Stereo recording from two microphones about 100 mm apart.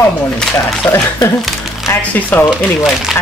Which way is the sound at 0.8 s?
15° left (ahead or behind).